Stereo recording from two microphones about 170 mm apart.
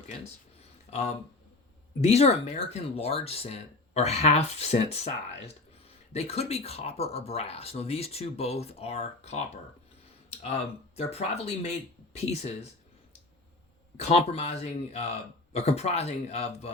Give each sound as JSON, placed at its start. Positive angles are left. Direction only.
{"t": 0.9, "sound": "speech", "side_deg": 40}
{"t": 13.9, "sound": "speech", "side_deg": 40}